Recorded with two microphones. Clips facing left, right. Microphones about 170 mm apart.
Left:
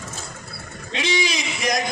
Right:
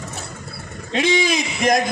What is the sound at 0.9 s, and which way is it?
Speech, 50° right (ahead or behind).